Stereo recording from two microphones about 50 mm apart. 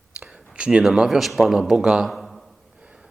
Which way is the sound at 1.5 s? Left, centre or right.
Centre.